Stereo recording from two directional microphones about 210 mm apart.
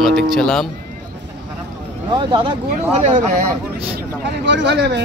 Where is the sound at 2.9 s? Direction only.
35° right (ahead or behind).